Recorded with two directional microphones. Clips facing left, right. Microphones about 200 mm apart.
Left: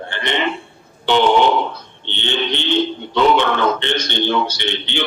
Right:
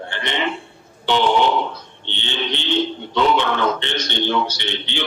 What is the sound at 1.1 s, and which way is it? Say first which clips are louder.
Speech: left 3 dB; 60° left (ahead or behind).